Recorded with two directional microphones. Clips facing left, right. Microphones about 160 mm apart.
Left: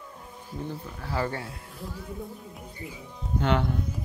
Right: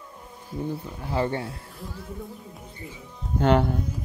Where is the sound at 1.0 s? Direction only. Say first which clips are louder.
Right 4 dB; 20° right (ahead or behind).